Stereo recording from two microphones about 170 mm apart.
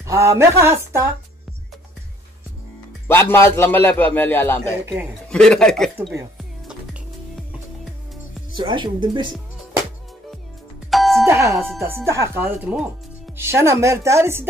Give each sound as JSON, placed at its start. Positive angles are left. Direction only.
{"t": 0.0, "sound": "speech", "side_deg": -15}
{"t": 3.1, "sound": "a man's voice", "side_deg": 15}
{"t": 8.5, "sound": "speech", "side_deg": -25}
{"t": 10.9, "sound": "doorbell", "side_deg": 0}
{"t": 11.2, "sound": "speech", "side_deg": -15}